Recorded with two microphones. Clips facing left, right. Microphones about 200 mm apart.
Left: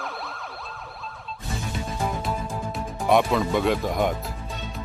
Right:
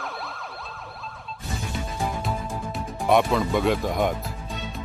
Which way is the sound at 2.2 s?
Centre (ahead or behind).